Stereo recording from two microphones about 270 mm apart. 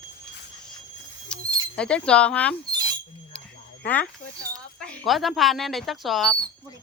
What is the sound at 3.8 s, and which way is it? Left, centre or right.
Speech, centre.